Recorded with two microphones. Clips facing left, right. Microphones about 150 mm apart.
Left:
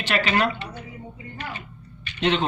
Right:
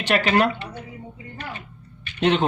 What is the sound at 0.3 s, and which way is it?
Speech, 55° right (ahead or behind).